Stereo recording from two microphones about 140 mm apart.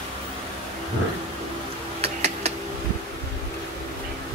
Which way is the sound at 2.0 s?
50° right (ahead or behind).